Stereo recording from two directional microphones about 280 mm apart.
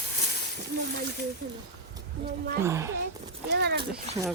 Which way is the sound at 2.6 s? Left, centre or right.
Centre.